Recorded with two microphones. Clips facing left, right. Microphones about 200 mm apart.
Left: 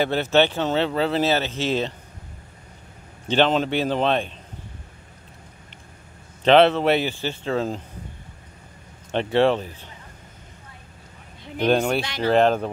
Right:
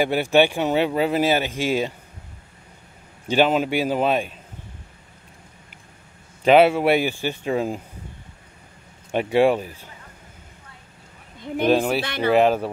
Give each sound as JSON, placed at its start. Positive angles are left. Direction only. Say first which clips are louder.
{"t": 0.0, "sound": "speech", "louder": "right 1 dB", "side_deg": -10}
{"t": 3.3, "sound": "speech", "louder": "right 1 dB", "side_deg": -10}
{"t": 6.4, "sound": "speech", "louder": "right 1 dB", "side_deg": -10}
{"t": 9.1, "sound": "speech", "louder": "right 1 dB", "side_deg": -10}
{"t": 11.6, "sound": "speech", "louder": "right 1 dB", "side_deg": -5}
{"t": 12.0, "sound": "speech", "louder": "right 1 dB", "side_deg": -60}
{"t": 12.3, "sound": "speech", "louder": "right 1 dB", "side_deg": -5}